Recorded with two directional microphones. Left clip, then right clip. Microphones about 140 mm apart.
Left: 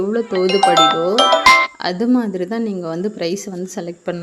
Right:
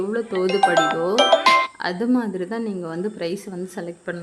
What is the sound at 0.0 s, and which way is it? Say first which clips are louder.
A woman's voice: left 5 dB; 25° left (ahead or behind).